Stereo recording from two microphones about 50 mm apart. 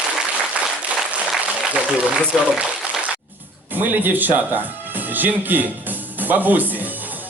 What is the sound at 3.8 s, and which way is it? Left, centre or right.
Speech, right.